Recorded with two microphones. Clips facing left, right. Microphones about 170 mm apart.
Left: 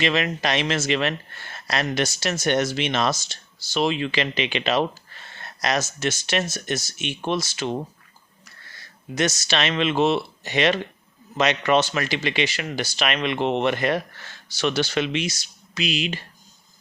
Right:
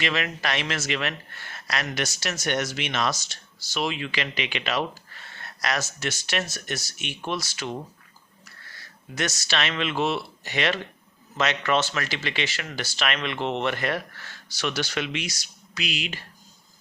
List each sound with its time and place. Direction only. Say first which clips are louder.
0.0 s speech: left 5 dB; 25° left (ahead or behind)
9.1 s speech: left 5 dB; 20° left (ahead or behind)